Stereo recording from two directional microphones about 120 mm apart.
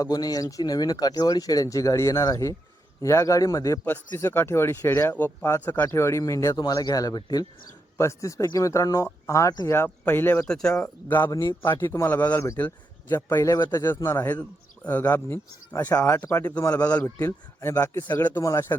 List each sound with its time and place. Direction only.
0.0 s speech: 30° left (ahead or behind)
3.8 s speech: 15° left (ahead or behind)
10.0 s a man's voice: 15° left (ahead or behind)
16.0 s a man's voice: 25° left (ahead or behind); by 17.2 s 10° left (ahead or behind)
17.2 s speech: 20° left (ahead or behind)